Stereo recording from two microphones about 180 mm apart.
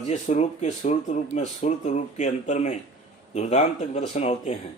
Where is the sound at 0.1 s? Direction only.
40° left (ahead or behind).